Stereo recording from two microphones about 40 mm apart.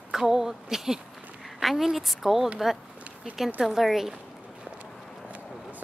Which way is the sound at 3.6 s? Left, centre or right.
Centre.